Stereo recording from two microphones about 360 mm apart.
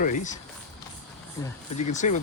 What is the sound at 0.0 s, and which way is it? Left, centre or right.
Speech, left.